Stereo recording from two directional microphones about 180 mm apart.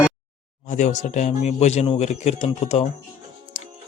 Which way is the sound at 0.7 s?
40° left (ahead or behind).